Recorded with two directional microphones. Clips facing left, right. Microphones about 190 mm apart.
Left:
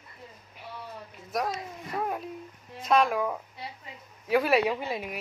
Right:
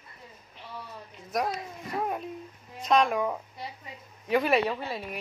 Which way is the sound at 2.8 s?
5° left (ahead or behind).